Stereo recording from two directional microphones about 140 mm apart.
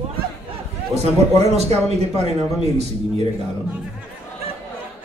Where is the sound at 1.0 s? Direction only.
50° right (ahead or behind).